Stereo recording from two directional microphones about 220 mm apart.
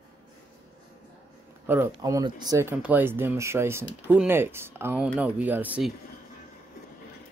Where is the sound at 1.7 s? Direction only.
15° right (ahead or behind).